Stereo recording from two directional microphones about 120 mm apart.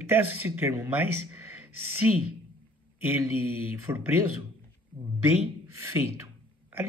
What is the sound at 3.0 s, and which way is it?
A man's voice, 15° right (ahead or behind).